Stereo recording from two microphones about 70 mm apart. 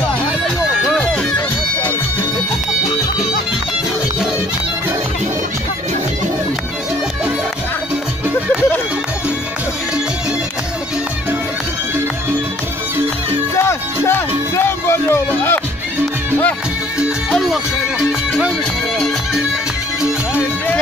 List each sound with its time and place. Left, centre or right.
13.6 s music: left
17.3 s music: centre
20.3 s music: left